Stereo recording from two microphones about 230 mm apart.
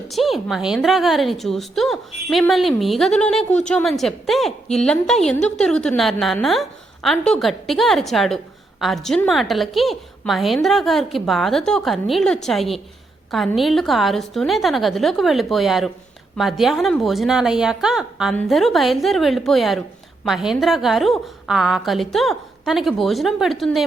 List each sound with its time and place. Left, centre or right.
0.1 s a woman's voice: centre